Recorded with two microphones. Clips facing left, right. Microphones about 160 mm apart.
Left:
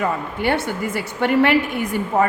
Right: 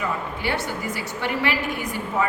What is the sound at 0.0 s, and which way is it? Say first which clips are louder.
A woman's voice: left 5 dB; 55° left (ahead or behind).